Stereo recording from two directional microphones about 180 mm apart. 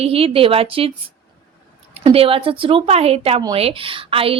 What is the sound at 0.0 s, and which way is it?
A woman's voice, 30° right (ahead or behind).